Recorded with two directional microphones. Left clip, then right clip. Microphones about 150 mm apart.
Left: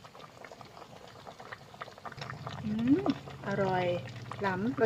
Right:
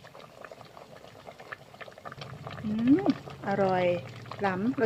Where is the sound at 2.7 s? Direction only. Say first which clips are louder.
Right 4 dB; 30° right (ahead or behind).